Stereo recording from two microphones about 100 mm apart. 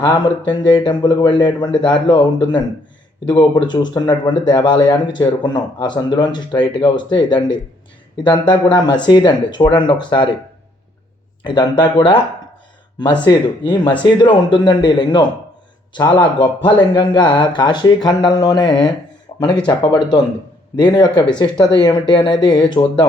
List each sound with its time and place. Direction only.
0.0 s speech: 50° left (ahead or behind)
11.4 s speech: 50° left (ahead or behind)
13.2 s speech: 45° left (ahead or behind)